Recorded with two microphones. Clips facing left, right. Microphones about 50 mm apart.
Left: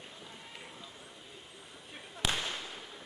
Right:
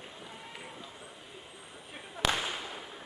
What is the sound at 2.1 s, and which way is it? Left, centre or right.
Firecracker, centre.